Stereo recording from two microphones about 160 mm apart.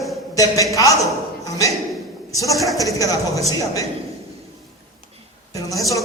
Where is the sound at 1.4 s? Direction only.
20° left (ahead or behind).